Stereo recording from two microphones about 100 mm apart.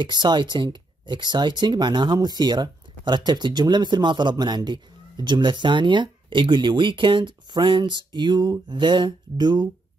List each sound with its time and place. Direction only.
0.0 s speech: 50° right (ahead or behind)